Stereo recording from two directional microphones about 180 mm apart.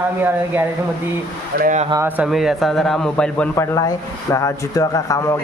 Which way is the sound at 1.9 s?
15° right (ahead or behind).